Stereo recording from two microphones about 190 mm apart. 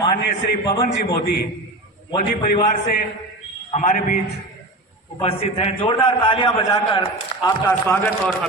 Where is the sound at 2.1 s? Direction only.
30° left (ahead or behind).